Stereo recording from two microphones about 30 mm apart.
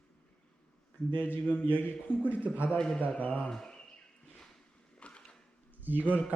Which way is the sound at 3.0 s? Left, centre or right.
Left.